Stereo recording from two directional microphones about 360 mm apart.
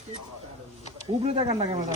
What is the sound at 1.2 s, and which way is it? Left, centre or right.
Speech, centre.